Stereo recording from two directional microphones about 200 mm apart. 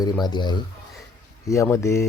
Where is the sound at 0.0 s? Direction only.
20° left (ahead or behind).